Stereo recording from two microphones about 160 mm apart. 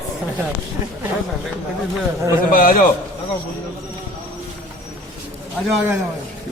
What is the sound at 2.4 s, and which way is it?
Speech, 60° left (ahead or behind).